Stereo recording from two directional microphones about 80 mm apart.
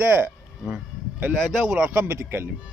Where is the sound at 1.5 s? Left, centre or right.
Centre.